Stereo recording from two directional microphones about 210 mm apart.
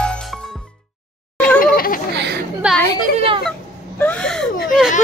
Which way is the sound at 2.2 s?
50° right (ahead or behind).